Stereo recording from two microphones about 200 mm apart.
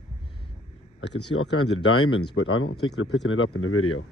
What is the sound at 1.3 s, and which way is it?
Speech, 90° left.